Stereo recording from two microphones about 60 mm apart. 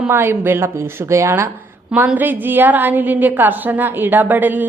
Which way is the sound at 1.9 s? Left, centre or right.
Right.